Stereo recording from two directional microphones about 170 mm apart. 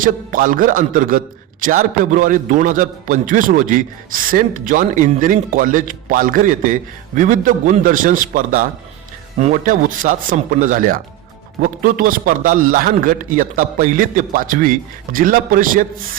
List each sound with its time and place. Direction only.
0.0 s a man's voice: 55° right (ahead or behind)